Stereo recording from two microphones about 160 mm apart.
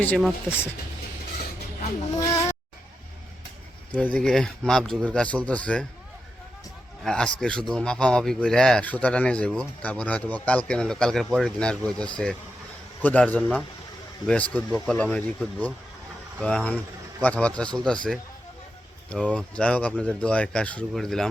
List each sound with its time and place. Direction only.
0.4 s speech: 15° left (ahead or behind)
2.1 s a sound: 20° left (ahead or behind)
3.9 s speech: 10° left (ahead or behind)
7.0 s a man's voice: 5° left (ahead or behind)